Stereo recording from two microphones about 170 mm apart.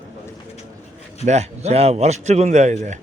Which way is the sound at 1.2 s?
40° right (ahead or behind).